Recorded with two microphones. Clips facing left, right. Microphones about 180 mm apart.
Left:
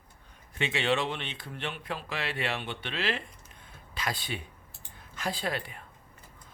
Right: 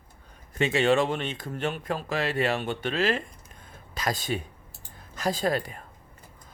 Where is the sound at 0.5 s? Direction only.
40° right (ahead or behind).